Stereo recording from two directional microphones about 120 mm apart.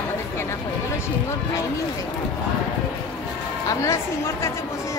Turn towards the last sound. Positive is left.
turn(degrees=25)  # may be behind; listen again after turning